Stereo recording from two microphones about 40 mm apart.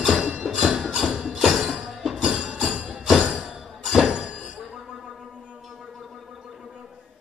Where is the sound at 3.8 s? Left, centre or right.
Centre.